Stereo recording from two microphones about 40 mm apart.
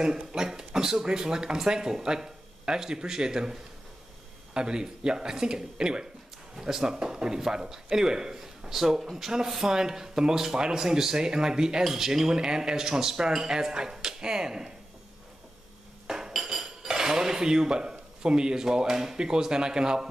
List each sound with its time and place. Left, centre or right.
0.0 s speech: centre
4.6 s speech: right
16.1 s dishes: centre